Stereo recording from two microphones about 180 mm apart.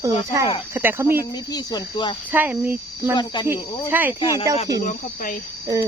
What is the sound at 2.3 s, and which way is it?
Speech, 10° right (ahead or behind).